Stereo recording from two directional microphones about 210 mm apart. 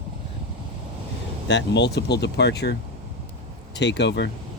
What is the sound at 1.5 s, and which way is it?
Speech, 55° left (ahead or behind).